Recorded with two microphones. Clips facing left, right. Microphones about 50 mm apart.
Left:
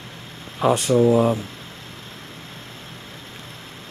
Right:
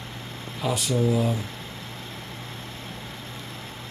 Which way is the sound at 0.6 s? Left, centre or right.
Left.